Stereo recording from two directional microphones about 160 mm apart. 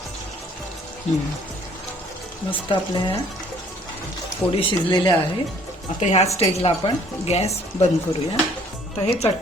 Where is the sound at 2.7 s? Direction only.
30° left (ahead or behind).